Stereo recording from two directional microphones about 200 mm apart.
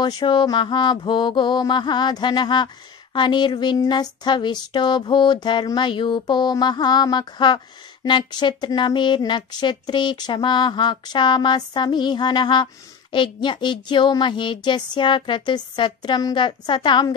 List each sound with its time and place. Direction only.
0.0 s mantra: 20° left (ahead or behind)